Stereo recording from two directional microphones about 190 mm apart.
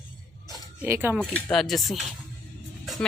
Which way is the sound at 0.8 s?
10° right (ahead or behind).